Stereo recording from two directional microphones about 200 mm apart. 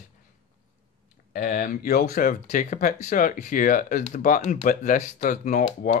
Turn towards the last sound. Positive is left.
turn(degrees=40)  # may be behind; listen again after turning